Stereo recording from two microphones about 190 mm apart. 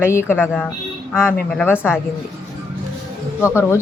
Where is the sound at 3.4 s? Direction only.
15° left (ahead or behind).